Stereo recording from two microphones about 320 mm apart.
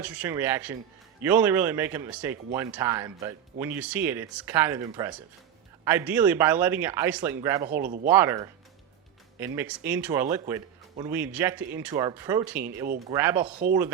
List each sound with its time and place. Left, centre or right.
0.0 s speech: centre
7.7 s speech: right
8.1 s speech: centre